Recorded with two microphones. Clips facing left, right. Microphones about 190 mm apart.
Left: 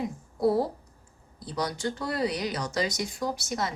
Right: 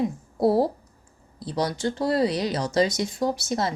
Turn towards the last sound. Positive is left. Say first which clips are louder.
# right 5 dB
turn(degrees=-30)  # may be behind; listen again after turning